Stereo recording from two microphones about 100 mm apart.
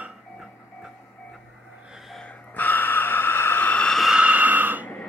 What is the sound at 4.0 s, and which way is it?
Snort, 10° right (ahead or behind).